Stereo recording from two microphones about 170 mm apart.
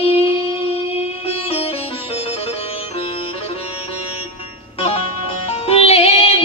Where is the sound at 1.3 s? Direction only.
35° left (ahead or behind).